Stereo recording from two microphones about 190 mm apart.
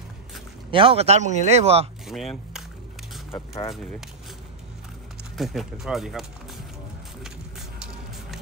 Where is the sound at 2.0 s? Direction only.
Centre (ahead or behind).